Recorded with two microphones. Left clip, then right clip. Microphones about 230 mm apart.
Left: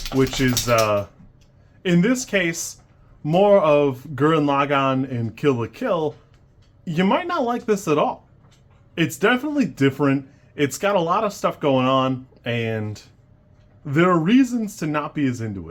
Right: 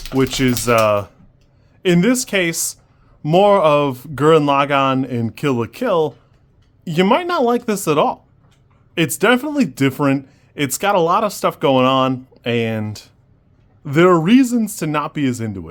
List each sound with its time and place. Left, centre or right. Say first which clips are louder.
0.3 s speech: right 5 dB; right